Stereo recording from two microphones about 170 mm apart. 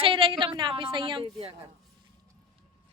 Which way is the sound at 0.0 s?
30° right (ahead or behind).